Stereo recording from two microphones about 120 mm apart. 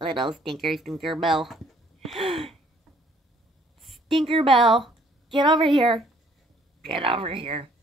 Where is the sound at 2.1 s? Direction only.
50° right (ahead or behind).